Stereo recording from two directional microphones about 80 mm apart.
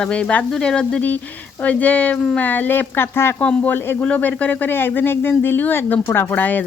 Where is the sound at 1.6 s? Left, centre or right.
Centre.